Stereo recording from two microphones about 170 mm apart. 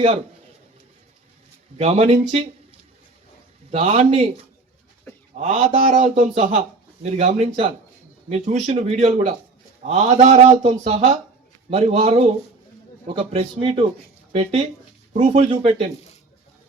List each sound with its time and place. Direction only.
1.8 s speech: 35° right (ahead or behind)
3.7 s speech: 40° right (ahead or behind)
5.4 s speech: 40° right (ahead or behind)